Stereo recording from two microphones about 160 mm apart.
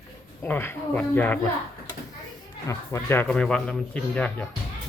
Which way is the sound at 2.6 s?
20° left (ahead or behind).